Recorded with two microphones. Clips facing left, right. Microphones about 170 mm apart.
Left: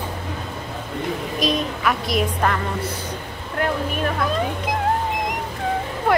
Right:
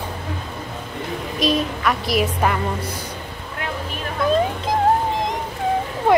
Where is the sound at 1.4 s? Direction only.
Centre (ahead or behind).